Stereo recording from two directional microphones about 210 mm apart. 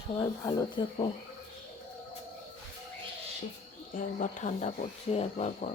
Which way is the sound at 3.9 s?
40° left (ahead or behind).